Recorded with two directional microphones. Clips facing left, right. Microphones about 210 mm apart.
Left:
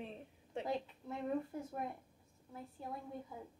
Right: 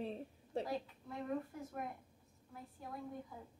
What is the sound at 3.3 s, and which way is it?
Speech, 20° left (ahead or behind).